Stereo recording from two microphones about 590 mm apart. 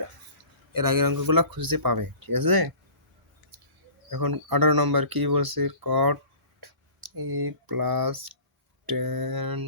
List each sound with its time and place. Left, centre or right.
0.7 s speech: right
4.1 s speech: right
7.2 s speech: right